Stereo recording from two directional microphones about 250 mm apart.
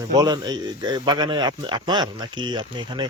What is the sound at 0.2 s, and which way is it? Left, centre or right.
A man's voice, centre.